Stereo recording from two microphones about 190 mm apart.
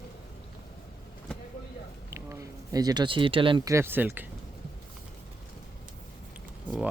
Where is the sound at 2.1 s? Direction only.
15° right (ahead or behind).